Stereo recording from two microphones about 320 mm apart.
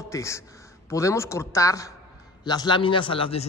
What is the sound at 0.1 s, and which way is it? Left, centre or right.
A man's voice, centre.